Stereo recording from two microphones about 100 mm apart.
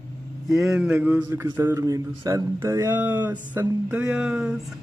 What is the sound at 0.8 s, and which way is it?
Speech, 15° right (ahead or behind).